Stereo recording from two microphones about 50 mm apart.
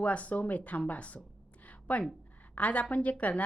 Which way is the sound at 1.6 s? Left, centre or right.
Left.